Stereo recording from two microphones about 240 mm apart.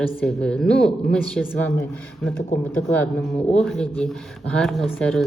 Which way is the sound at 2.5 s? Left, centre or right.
Left.